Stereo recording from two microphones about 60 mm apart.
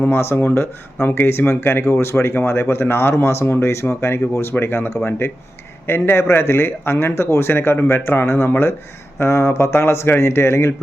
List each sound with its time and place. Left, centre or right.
0.1 s speech: left
5.9 s speech: left